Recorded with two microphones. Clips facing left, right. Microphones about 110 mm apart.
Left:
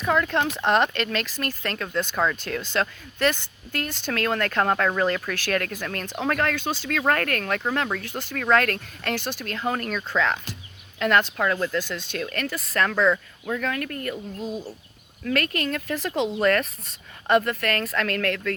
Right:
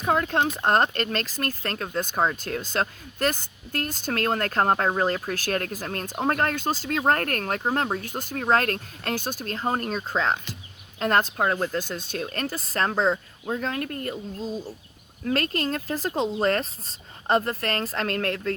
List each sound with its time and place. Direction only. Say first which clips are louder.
0.0 s speech: even; 35° right (ahead or behind)
8.4 s speech: left 1 dB; 35° right (ahead or behind)
14.3 s speech: even; 10° left (ahead or behind)
15.2 s speech: even; 30° right (ahead or behind)